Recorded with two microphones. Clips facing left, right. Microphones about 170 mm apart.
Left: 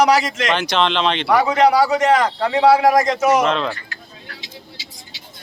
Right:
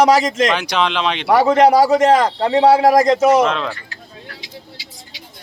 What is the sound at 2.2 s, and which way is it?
Speech, 25° right (ahead or behind).